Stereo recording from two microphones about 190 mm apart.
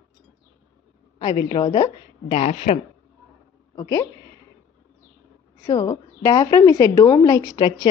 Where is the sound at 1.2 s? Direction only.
25° left (ahead or behind).